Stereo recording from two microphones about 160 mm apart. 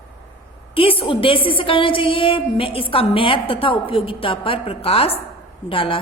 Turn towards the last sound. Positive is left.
turn(degrees=35)  # may be behind; listen again after turning